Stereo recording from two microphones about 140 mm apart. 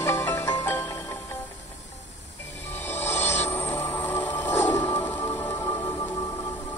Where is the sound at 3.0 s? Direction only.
15° left (ahead or behind).